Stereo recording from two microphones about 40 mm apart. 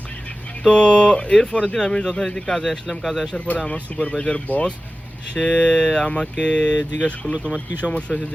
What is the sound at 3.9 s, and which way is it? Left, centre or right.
Speech, left.